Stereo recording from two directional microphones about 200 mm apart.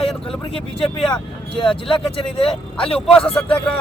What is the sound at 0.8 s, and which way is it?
Speech, centre (ahead or behind).